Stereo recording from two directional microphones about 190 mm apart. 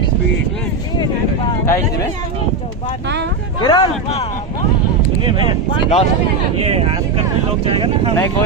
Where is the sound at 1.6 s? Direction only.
15° left (ahead or behind).